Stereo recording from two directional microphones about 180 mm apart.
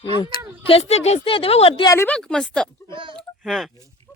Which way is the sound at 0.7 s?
35° left (ahead or behind).